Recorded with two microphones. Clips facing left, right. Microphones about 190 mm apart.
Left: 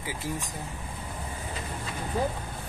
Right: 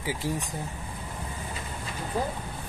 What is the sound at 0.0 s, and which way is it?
Speech, 15° right (ahead or behind).